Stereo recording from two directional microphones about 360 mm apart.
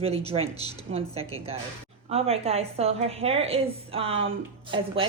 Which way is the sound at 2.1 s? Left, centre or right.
Centre.